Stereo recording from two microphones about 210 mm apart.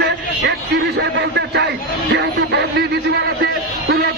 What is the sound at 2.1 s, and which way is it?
Music, 50° right (ahead or behind).